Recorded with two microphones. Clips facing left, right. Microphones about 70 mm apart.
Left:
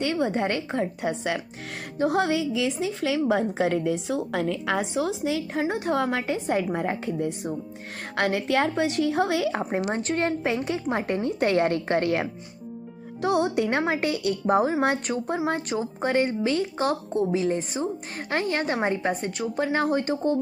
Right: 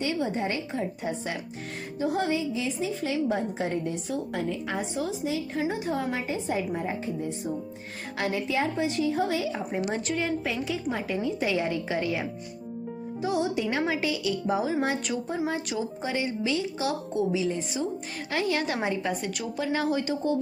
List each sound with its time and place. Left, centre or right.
0.0 s a woman's voice: left
2.0 s a woman's voice: left
5.6 s a woman's voice: left
9.6 s speech: left
10.2 s a woman's voice: left
13.2 s a woman's voice: left